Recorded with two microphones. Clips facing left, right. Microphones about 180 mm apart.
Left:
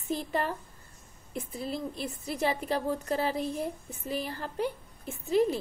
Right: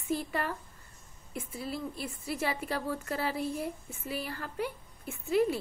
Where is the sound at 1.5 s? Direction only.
20° left (ahead or behind).